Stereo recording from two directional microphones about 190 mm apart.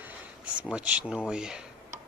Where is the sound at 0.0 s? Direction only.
10° right (ahead or behind).